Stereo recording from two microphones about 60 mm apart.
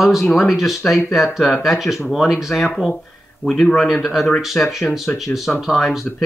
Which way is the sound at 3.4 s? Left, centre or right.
Left.